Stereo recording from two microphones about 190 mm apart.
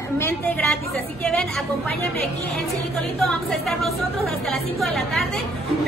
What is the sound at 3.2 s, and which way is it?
A woman's voice, centre (ahead or behind).